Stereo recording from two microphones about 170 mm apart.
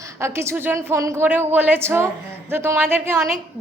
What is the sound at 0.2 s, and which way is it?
A woman's voice, 15° right (ahead or behind).